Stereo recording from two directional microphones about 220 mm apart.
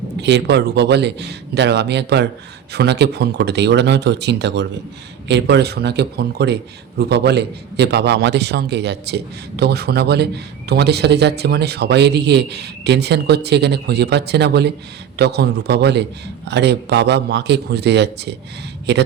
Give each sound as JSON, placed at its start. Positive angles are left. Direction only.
{"t": 0.2, "sound": "a man's voice", "side_deg": -50}